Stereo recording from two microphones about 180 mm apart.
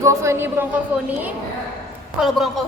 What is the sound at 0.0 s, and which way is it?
Speech, 15° right (ahead or behind).